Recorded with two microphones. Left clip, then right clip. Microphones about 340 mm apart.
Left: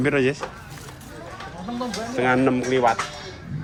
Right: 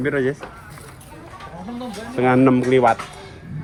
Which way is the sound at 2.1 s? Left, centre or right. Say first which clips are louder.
Right 4 dB; centre.